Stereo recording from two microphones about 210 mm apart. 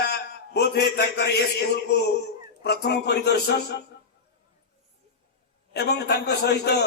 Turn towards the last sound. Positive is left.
turn(degrees=50)  # may be behind; listen again after turning